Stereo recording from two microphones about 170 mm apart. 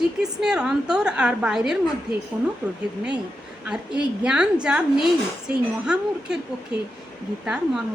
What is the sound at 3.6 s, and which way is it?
A woman's voice, 5° right (ahead or behind).